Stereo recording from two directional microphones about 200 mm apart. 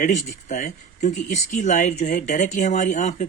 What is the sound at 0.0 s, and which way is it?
Speech, 35° left (ahead or behind).